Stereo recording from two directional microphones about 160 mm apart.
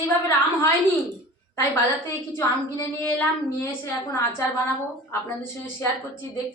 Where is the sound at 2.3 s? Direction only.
15° left (ahead or behind).